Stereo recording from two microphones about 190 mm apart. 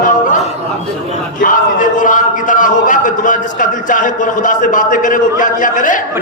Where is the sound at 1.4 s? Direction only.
45° left (ahead or behind).